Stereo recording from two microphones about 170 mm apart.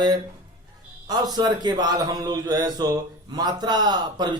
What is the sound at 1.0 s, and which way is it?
A man's voice, 20° right (ahead or behind).